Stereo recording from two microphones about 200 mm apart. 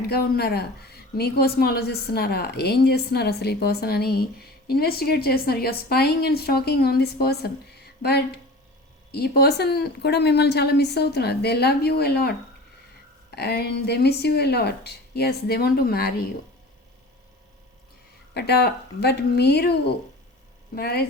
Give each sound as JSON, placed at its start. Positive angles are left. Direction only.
{"t": 0.1, "sound": "a woman's voice", "side_deg": 50}
{"t": 13.3, "sound": "a woman's voice", "side_deg": 55}
{"t": 18.3, "sound": "speech", "side_deg": 55}
{"t": 20.7, "sound": "a woman's voice", "side_deg": 50}